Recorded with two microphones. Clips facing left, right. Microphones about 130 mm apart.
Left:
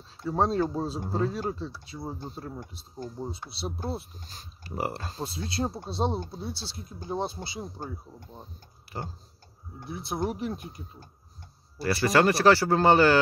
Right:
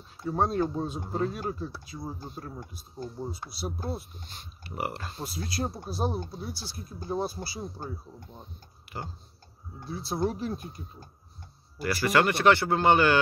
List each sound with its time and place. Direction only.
0.3 s speech: 35° left (ahead or behind)
8.3 s speech: 35° left (ahead or behind)
9.8 s speech: 20° left (ahead or behind)
11.8 s speech: 30° left (ahead or behind)